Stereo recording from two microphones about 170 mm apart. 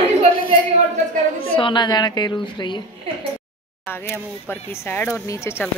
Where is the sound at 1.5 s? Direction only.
30° left (ahead or behind).